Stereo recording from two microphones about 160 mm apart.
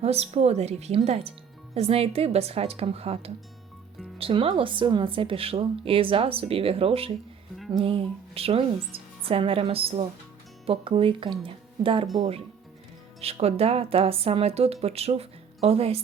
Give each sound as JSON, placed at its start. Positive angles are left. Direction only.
{"t": 0.0, "sound": "speech", "side_deg": -40}
{"t": 13.2, "sound": "speech", "side_deg": -40}